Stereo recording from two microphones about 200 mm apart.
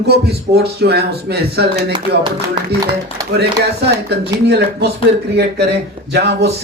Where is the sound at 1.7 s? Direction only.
25° right (ahead or behind).